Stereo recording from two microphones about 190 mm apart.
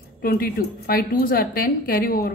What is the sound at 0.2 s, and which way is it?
A woman's voice, 50° left (ahead or behind).